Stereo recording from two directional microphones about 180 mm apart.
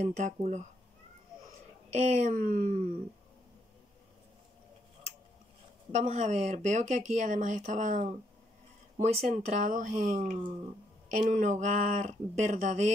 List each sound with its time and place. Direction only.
0.0 s speech: 40° right (ahead or behind)
2.0 s speech: 40° right (ahead or behind)
5.9 s speech: 35° right (ahead or behind)